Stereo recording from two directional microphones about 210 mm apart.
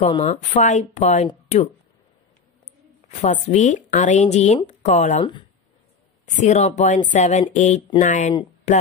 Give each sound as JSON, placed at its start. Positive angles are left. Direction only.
{"t": 0.1, "sound": "speech", "side_deg": 30}
{"t": 3.1, "sound": "speech", "side_deg": 35}
{"t": 6.2, "sound": "speech", "side_deg": 35}